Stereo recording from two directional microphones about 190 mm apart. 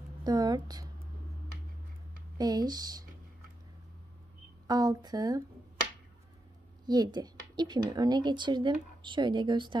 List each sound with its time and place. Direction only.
0.2 s a woman's voice: 20° right (ahead or behind)
2.3 s speech: 20° right (ahead or behind)
4.6 s speech: 20° right (ahead or behind)
6.9 s speech: 20° right (ahead or behind)